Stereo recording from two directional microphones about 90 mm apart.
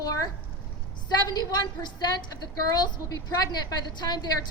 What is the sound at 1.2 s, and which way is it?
A woman's voice, 50° left (ahead or behind).